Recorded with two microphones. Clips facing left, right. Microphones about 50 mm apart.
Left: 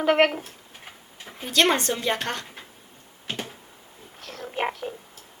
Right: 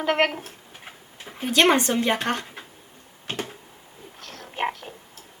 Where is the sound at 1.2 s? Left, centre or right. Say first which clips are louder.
Right 7 dB; centre.